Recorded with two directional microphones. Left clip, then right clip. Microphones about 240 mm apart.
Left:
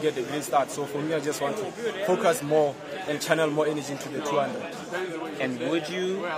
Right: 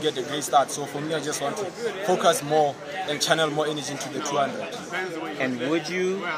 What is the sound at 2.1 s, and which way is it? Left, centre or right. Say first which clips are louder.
A man's voice: right 2 dB; centre.